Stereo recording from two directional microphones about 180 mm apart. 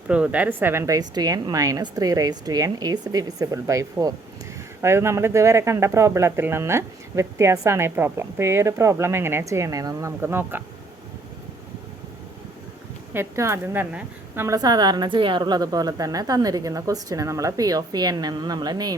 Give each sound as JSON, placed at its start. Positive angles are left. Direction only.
{"t": 0.1, "sound": "a woman's voice", "side_deg": -5}
{"t": 13.1, "sound": "a woman's voice", "side_deg": -15}